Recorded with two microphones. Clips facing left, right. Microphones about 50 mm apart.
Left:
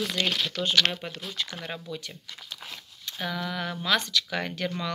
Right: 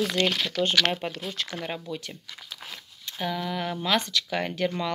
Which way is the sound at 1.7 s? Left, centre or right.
Right.